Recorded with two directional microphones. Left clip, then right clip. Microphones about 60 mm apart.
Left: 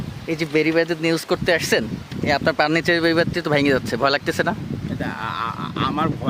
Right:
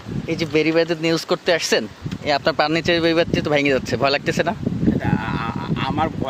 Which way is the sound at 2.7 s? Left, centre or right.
Left.